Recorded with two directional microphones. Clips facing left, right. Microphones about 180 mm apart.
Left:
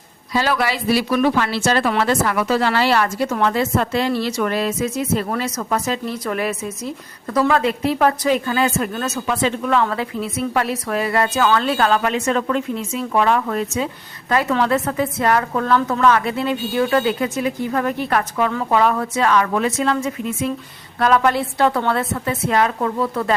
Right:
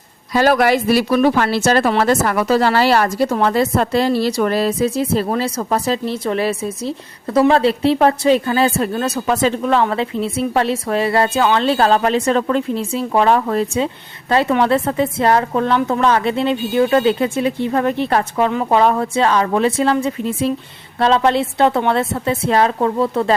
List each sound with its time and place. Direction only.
0.3 s a woman's voice: 50° right (ahead or behind); by 23.3 s 25° right (ahead or behind)